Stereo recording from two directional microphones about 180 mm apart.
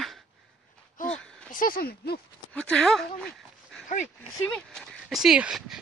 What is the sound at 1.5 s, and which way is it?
Speech, 50° left (ahead or behind).